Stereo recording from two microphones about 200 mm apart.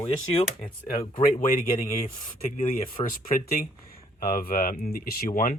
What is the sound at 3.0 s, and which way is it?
Speech, 45° left (ahead or behind).